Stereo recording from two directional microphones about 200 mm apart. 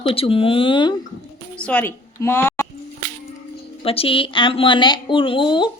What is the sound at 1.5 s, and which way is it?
A woman's voice, 5° left (ahead or behind).